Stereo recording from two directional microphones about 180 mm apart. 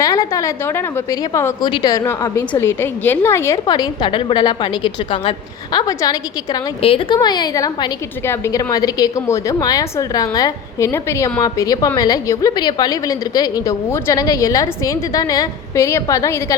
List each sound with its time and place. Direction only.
0.0 s a woman's voice: 20° left (ahead or behind)